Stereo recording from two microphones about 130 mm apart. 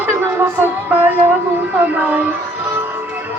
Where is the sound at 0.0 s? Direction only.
15° right (ahead or behind).